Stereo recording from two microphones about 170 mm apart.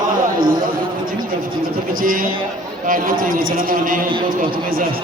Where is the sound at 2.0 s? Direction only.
55° right (ahead or behind).